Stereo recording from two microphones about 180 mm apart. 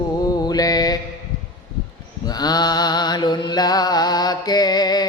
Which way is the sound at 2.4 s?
20° left (ahead or behind).